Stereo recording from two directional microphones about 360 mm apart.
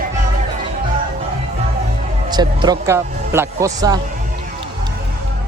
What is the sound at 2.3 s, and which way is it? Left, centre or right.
A man's voice, centre.